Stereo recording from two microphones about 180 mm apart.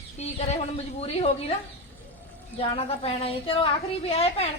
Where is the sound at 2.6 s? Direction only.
30° left (ahead or behind).